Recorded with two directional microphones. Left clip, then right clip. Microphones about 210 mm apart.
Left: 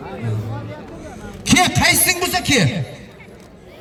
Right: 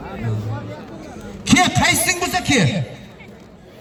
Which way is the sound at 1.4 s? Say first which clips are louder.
Left 1 dB; 30° left (ahead or behind).